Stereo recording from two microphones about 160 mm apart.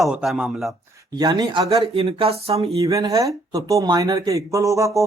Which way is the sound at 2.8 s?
20° right (ahead or behind).